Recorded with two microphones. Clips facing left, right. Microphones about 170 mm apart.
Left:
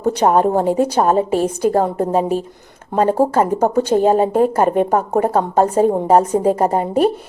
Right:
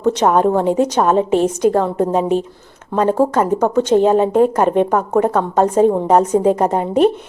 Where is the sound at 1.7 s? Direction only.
45° left (ahead or behind).